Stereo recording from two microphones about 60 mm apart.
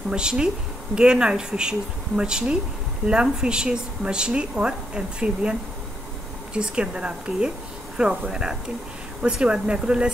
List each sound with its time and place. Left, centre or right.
0.1 s speech: centre